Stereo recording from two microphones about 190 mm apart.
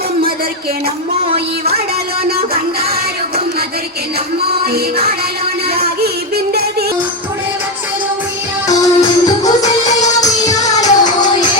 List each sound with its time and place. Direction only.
4.6 s music: 55° right (ahead or behind)
6.3 s music: 55° right (ahead or behind)
8.6 s music: 20° left (ahead or behind)
10.8 s music: 20° left (ahead or behind)